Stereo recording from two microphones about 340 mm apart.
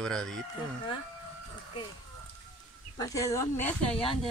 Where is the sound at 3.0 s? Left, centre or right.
Centre.